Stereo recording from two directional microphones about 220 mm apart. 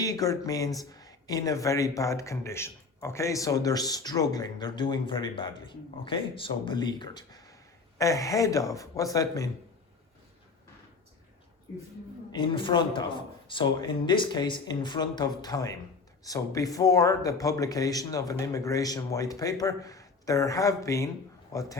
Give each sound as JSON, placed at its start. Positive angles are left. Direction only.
{"t": 0.0, "sound": "speech", "side_deg": 15}
{"t": 12.3, "sound": "speech", "side_deg": 20}